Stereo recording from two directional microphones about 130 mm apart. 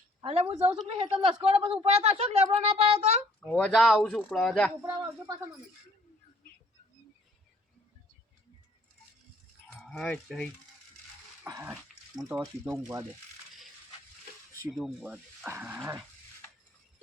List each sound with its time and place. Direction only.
0.2 s speech: 45° right (ahead or behind)
3.7 s speech: centre (ahead or behind)
3.9 s speech: 10° left (ahead or behind)
4.8 s speech: 20° right (ahead or behind)
9.8 s speech: 5° left (ahead or behind)
11.4 s speech: 20° right (ahead or behind)
14.7 s speech: centre (ahead or behind)
15.4 s dog: 15° right (ahead or behind)